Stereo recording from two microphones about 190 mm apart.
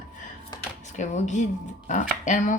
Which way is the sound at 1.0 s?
40° left (ahead or behind).